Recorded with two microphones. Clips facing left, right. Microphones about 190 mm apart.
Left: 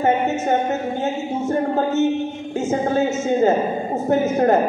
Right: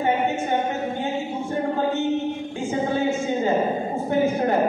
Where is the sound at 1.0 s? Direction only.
40° left (ahead or behind).